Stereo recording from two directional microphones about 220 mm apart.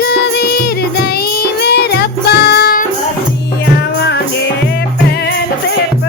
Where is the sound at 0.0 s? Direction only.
45° left (ahead or behind).